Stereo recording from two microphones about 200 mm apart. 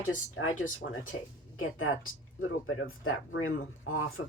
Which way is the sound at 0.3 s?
90° left.